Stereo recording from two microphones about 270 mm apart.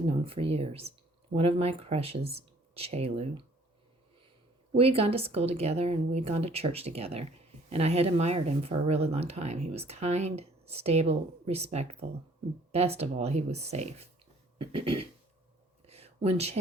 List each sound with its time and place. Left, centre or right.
0.1 s speech: right
4.7 s speech: right
15.9 s a sound: right